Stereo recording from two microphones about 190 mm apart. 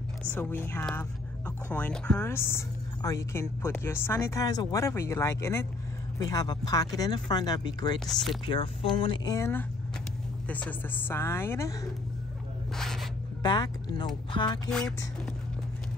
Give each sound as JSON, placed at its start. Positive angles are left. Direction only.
{"t": 0.2, "sound": "speech", "side_deg": 10}
{"t": 8.1, "sound": "speech", "side_deg": 0}
{"t": 8.5, "sound": "speech", "side_deg": 25}
{"t": 12.7, "sound": "a sound", "side_deg": 0}
{"t": 13.4, "sound": "speech", "side_deg": 25}
{"t": 14.7, "sound": "speech", "side_deg": 5}